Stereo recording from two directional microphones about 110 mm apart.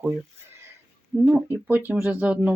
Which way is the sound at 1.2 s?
15° right (ahead or behind).